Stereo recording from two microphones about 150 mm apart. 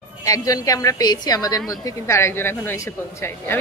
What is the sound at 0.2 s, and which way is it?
A woman's voice, 25° left (ahead or behind).